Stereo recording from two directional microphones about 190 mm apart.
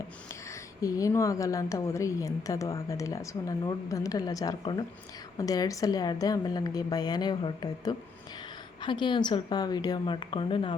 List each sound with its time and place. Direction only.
0.8 s a woman's voice: 20° left (ahead or behind)